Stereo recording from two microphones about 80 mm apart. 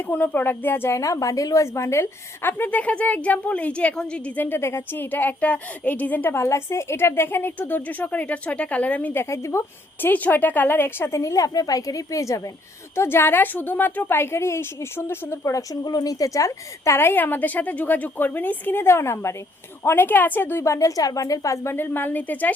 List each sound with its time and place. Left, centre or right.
0.0 s a woman's voice: left
1.0 s a woman's voice: left; by 4.4 s centre
4.4 s a woman's voice: left
9.3 s speech: left
10.0 s a woman's voice: left
11.2 s a woman's voice: left
13.0 s a woman's voice: left
15.7 s a woman's voice: left